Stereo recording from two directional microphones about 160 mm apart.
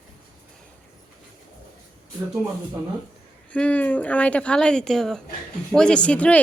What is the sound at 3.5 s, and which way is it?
A woman's voice, 10° left (ahead or behind).